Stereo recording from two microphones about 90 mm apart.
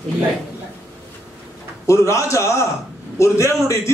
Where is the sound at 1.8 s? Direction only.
35° left (ahead or behind).